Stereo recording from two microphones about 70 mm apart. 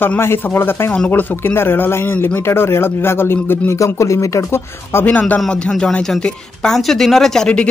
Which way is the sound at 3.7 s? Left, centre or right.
Left.